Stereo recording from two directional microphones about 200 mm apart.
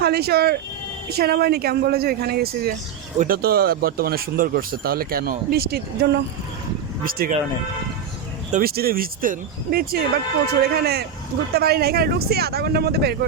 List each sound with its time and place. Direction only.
0.0 s speech: 50° right (ahead or behind)
8.5 s speech: 50° right (ahead or behind)